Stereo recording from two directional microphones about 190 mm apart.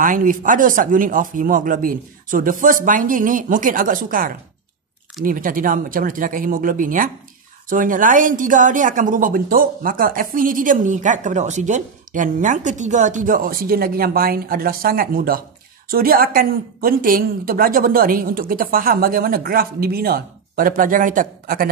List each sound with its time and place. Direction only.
0.0 s speech: 45° right (ahead or behind)